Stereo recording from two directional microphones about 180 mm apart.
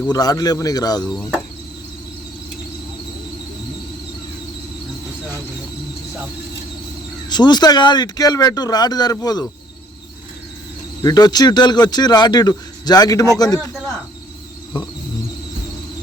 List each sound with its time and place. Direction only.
0.1 s speech: 20° left (ahead or behind)
7.3 s speech: 25° left (ahead or behind)
11.0 s speech: 20° left (ahead or behind)